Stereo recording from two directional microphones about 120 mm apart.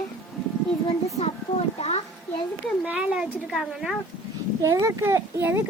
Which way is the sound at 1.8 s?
60° left (ahead or behind).